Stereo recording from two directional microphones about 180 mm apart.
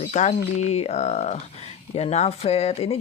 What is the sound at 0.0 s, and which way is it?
Speech, 40° left (ahead or behind).